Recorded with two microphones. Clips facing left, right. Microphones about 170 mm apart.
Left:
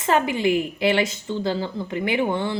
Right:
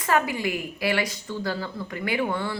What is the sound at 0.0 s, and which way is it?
A woman's voice, 25° left (ahead or behind).